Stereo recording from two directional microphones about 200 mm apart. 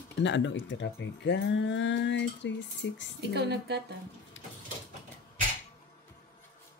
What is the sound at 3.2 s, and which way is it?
Speech, 55° right (ahead or behind).